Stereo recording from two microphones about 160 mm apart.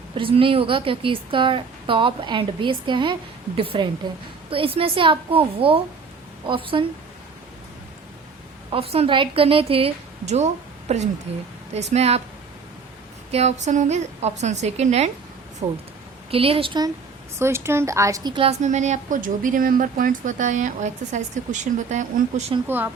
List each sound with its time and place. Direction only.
0.2 s a woman's voice: 35° right (ahead or behind)
8.7 s a woman's voice: 35° right (ahead or behind)
13.3 s a woman's voice: 45° right (ahead or behind); by 16.9 s 30° right (ahead or behind)
17.4 s a woman's voice: 15° right (ahead or behind)
18.6 s speech: 45° right (ahead or behind)
22.6 s speech: 10° right (ahead or behind)